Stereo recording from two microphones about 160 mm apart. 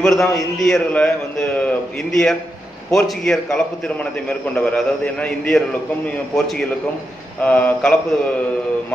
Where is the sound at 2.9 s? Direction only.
5° left (ahead or behind).